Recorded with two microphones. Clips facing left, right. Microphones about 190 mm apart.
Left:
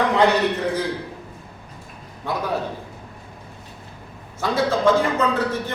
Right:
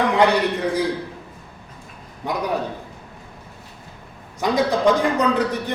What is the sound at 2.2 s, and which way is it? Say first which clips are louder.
Speech: right 1 dB; 15° right (ahead or behind).